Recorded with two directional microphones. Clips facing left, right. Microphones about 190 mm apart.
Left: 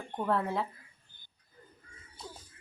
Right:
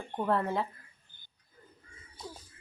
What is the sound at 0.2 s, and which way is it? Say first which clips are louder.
Speech: right 1 dB; centre (ahead or behind).